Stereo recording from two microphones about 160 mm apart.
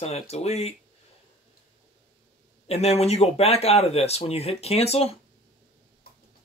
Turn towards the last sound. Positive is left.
turn(degrees=40)  # may be behind; listen again after turning